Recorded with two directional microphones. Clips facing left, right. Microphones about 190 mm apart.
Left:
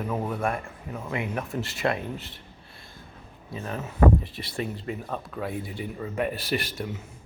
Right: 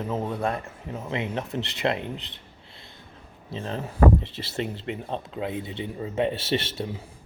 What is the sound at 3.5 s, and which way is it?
Speech, 30° right (ahead or behind).